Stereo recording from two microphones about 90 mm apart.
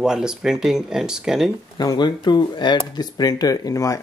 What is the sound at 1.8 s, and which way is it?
Speech, 55° left (ahead or behind).